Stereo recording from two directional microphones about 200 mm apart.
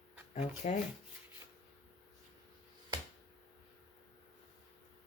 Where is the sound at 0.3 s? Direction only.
35° left (ahead or behind).